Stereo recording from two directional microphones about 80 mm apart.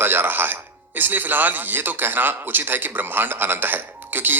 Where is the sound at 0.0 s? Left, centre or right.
Right.